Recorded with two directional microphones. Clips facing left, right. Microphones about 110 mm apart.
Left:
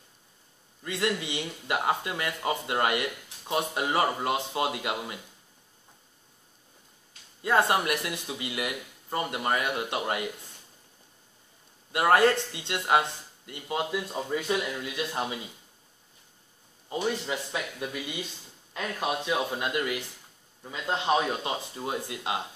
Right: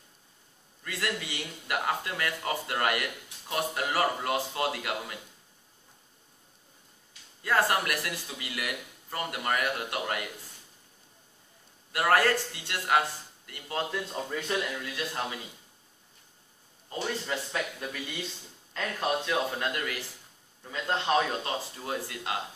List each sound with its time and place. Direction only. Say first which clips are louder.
0.8 s speech: left 5 dB; 20° left (ahead or behind)
7.4 s speech: left 3 dB; 20° left (ahead or behind)
11.9 s speech: left 3 dB; 20° left (ahead or behind)
16.9 s speech: left 3 dB; 15° left (ahead or behind)